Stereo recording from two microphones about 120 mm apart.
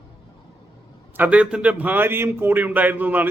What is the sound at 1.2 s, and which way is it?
A man's voice, 10° right (ahead or behind).